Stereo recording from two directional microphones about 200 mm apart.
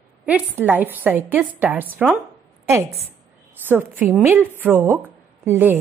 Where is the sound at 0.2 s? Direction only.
10° right (ahead or behind).